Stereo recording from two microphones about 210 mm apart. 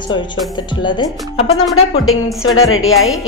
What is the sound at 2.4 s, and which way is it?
Speech, 70° left (ahead or behind).